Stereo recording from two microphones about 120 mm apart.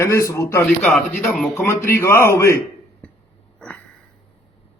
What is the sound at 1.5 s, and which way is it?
A man's voice, 25° left (ahead or behind).